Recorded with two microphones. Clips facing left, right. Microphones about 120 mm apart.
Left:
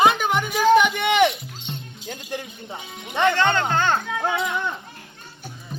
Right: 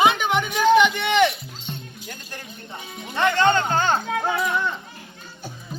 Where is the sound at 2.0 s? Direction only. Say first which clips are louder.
Left 6 dB; 25° left (ahead or behind).